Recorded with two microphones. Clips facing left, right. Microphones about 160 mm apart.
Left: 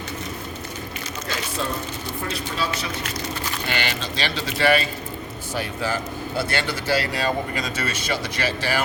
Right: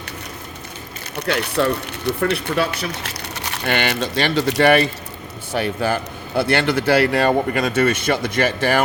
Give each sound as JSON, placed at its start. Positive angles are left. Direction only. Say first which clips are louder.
{"t": 1.1, "sound": "a man's voice", "louder": "right 10 dB", "side_deg": -65}